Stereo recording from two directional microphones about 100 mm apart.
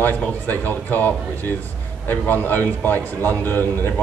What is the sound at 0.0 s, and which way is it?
A man's voice, 20° left (ahead or behind).